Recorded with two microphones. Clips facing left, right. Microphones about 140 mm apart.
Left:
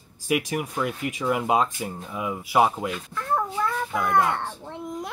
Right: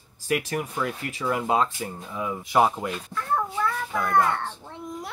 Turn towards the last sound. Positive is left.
turn(degrees=15)  # may be behind; listen again after turning